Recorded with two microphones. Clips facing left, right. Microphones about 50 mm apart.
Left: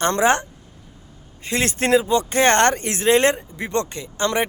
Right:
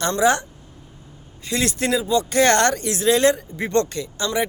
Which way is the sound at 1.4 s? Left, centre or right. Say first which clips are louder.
Left 1 dB; left.